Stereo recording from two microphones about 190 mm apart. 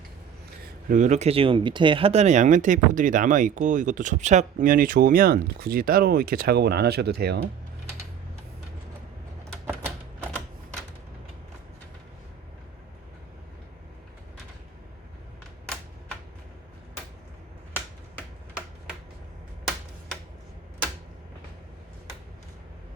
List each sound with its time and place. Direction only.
0.6 s speech: 45° right (ahead or behind)